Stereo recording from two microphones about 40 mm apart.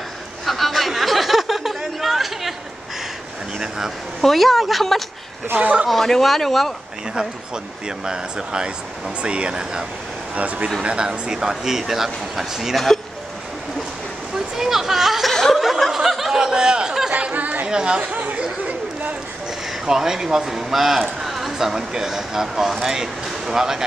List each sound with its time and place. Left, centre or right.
0.5 s chatter: centre
3.5 s vehicle: centre
4.2 s speech: centre
5.6 s speech: right
5.9 s speech: centre
8.0 s speech: centre
10.3 s speech: right
10.8 s speech: right; by 12.7 s centre
12.7 s speech: centre
14.3 s speech: centre
15.5 s snicker: centre
17.3 s chatter: right
17.6 s speech: right
19.9 s speech: centre